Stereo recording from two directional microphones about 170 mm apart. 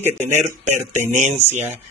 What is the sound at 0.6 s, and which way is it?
Speech, 45° right (ahead or behind).